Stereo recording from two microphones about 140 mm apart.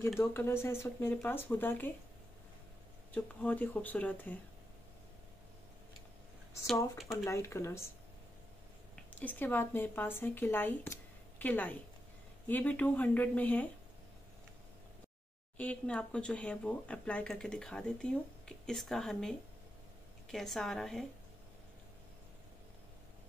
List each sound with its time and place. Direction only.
0.2 s speech: 20° left (ahead or behind)
3.2 s speech: 10° left (ahead or behind)
7.2 s speech: 20° left (ahead or behind)
8.9 s a woman's voice: 10° left (ahead or behind)
15.5 s a woman's voice: 10° left (ahead or behind)